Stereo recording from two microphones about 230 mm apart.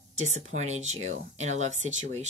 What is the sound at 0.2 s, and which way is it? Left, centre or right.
Speech, right.